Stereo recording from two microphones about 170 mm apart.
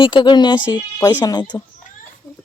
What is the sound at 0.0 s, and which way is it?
Speech, 25° left (ahead or behind).